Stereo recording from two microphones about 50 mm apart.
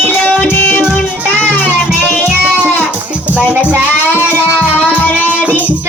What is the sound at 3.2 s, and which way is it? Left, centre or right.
Music, right.